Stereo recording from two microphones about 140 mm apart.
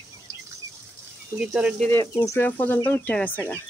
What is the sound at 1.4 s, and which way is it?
Speech, 5° right (ahead or behind).